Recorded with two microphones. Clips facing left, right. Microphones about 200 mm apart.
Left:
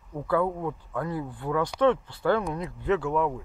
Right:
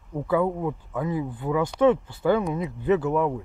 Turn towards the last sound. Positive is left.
turn(degrees=-5)  # may be behind; listen again after turning